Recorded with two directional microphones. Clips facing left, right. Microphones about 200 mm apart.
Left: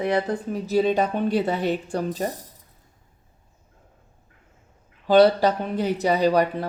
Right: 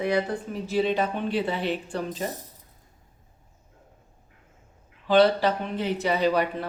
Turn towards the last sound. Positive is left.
turn(degrees=40)  # may be behind; listen again after turning